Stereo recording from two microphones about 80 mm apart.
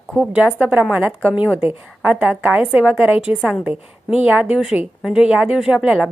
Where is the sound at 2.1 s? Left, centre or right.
Centre.